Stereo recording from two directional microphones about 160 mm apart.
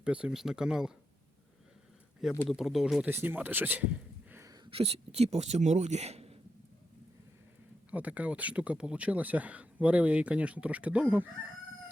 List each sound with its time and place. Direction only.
0.0 s speech: 5° right (ahead or behind)
2.5 s speech: centre (ahead or behind)
4.6 s speech: 35° right (ahead or behind)
7.9 s speech: 10° right (ahead or behind)